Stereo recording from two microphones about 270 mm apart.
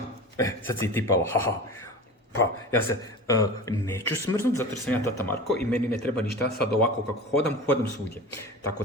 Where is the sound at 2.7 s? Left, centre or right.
Centre.